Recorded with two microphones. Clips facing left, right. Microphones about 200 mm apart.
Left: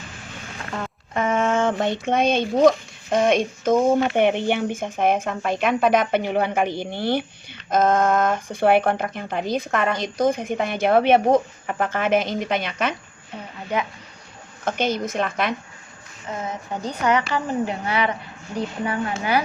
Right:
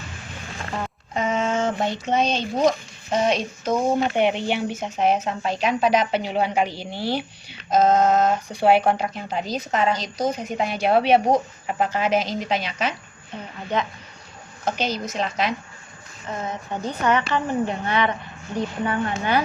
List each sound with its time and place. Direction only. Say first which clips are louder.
1.1 s a sound: left 2 dB; 55° left (ahead or behind)
2.0 s a child's voice: left 3 dB; 55° left (ahead or behind)
13.7 s speech: even; 10° left (ahead or behind)
14.6 s a child's voice: left 2 dB; 55° left (ahead or behind)
16.3 s speech: even; 10° left (ahead or behind)